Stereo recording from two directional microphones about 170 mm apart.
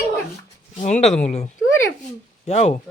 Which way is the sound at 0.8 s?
40° left (ahead or behind).